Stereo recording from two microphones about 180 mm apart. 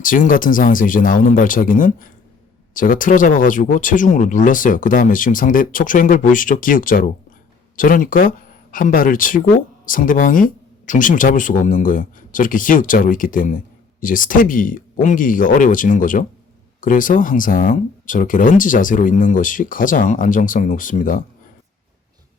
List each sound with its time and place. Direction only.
0.0 s speech: 50° left (ahead or behind)